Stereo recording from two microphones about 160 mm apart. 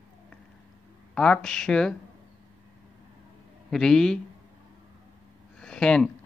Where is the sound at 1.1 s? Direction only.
5° left (ahead or behind).